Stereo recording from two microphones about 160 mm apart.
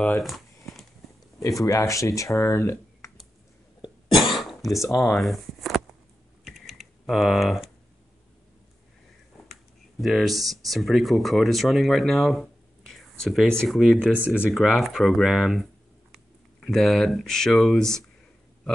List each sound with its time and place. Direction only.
0.0 s a sound: centre (ahead or behind)
1.6 s speech: 20° left (ahead or behind)
3.8 s cough: 30° left (ahead or behind)
4.4 s throat clearing: centre (ahead or behind)
4.9 s speech: centre (ahead or behind)
6.4 s typing: centre (ahead or behind)
9.5 s computer keyboard: centre (ahead or behind)
10.5 s speech: centre (ahead or behind)